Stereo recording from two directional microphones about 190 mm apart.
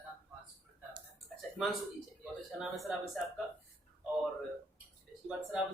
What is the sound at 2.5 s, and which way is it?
Speech, centre (ahead or behind).